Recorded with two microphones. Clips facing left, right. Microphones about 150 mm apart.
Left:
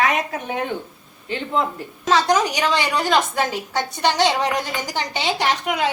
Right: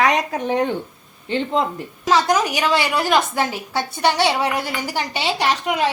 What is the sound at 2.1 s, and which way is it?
A woman's voice, 10° right (ahead or behind).